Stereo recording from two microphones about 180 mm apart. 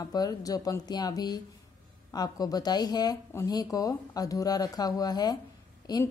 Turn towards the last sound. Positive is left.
turn(degrees=20)  # may be behind; listen again after turning